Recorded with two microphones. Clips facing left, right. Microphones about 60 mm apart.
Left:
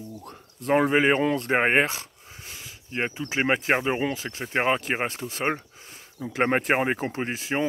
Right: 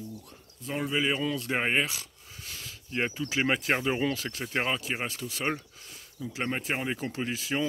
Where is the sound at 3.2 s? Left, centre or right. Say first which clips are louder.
Left 5 dB; left.